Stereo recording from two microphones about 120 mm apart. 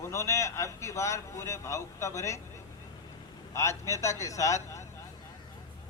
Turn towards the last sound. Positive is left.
turn(degrees=25)  # may be behind; listen again after turning